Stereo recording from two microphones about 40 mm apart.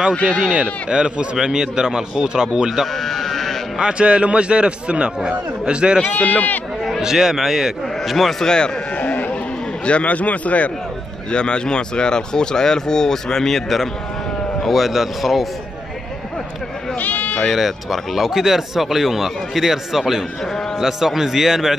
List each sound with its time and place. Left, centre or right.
0.5 s a man's voice: right
3.0 s sheep: centre
3.8 s a man's voice: right
6.0 s speech: left
7.0 s speech: centre
8.2 s speech: centre
8.5 s speech: left
8.9 s a sound: left
9.8 s a man's voice: left
11.3 s speech: left; by 15.4 s centre
17.0 s sheep: left
17.4 s speech: centre